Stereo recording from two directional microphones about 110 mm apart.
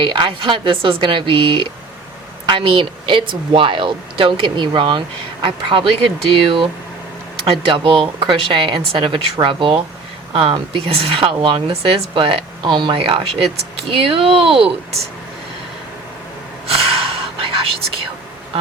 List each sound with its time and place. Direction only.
0.0 s a woman's voice: 45° right (ahead or behind)
16.6 s gasp: 60° right (ahead or behind)